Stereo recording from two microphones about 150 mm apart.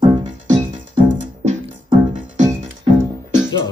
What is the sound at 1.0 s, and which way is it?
Music, 55° right (ahead or behind).